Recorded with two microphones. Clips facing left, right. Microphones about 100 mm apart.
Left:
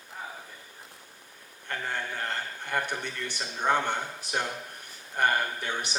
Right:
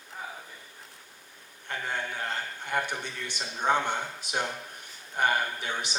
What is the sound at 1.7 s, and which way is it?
A man's voice, 15° right (ahead or behind).